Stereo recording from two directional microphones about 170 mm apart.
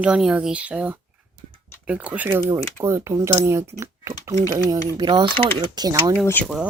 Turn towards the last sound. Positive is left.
turn(degrees=10)  # may be behind; listen again after turning